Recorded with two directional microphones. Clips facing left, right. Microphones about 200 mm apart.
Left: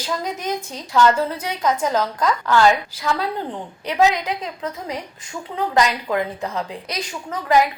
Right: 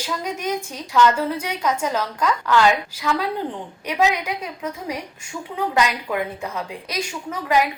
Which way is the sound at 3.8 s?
10° right (ahead or behind).